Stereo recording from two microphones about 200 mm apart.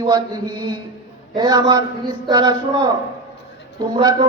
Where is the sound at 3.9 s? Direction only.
20° right (ahead or behind).